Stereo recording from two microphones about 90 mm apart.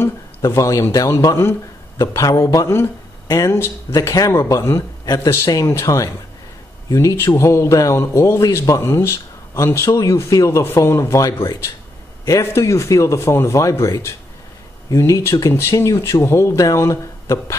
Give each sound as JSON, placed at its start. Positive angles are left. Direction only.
{"t": 0.0, "sound": "speech", "side_deg": 30}